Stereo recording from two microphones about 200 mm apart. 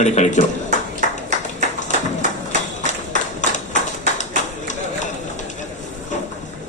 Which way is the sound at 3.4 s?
35° left (ahead or behind).